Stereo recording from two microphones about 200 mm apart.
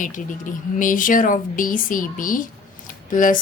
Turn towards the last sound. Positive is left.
turn(degrees=40)  # may be behind; listen again after turning